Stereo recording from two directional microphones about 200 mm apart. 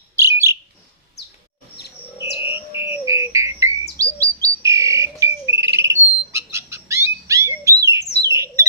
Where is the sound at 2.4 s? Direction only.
15° right (ahead or behind).